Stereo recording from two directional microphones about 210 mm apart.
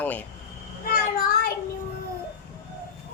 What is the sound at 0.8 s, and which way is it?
Child singing, 45° left (ahead or behind).